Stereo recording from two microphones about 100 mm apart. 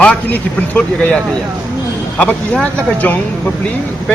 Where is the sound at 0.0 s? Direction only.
15° left (ahead or behind).